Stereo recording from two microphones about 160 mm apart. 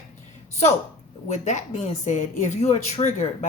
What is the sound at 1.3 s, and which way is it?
A woman's voice, 45° left (ahead or behind).